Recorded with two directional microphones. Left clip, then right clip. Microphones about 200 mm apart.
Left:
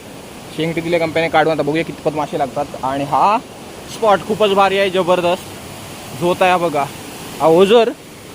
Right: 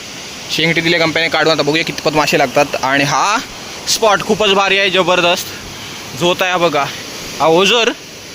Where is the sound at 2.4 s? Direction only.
40° right (ahead or behind).